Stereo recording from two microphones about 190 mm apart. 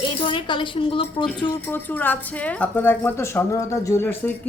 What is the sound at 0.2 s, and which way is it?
Speech, 25° left (ahead or behind).